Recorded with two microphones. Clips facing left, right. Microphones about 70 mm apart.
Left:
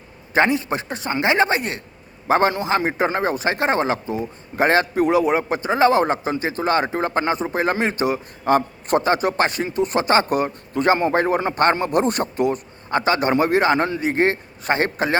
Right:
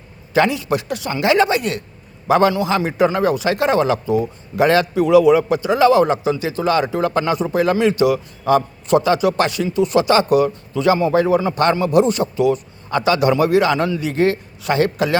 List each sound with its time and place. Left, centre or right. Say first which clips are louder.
0.3 s a man's voice: right 2 dB; left
12.9 s a man's voice: right 3 dB; left